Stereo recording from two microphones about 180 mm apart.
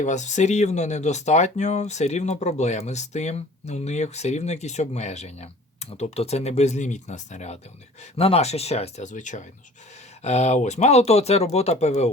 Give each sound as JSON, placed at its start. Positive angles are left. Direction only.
{"t": 0.0, "sound": "speech", "side_deg": 40}